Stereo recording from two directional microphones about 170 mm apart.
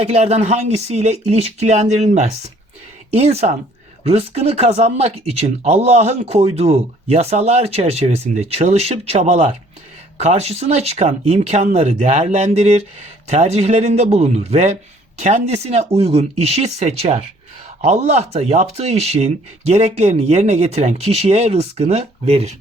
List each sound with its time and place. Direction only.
0.0 s speech: 40° right (ahead or behind)